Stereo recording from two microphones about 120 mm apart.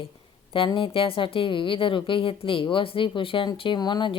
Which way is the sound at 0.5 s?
45° left (ahead or behind).